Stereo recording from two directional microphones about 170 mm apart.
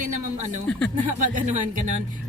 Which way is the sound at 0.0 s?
45° right (ahead or behind).